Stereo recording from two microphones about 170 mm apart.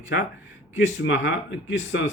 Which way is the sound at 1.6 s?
90° left.